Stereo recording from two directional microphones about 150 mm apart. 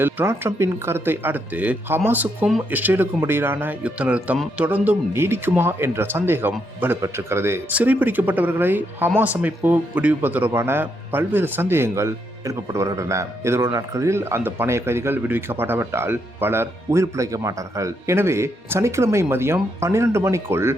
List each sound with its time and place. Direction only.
0.0 s speech: 15° right (ahead or behind)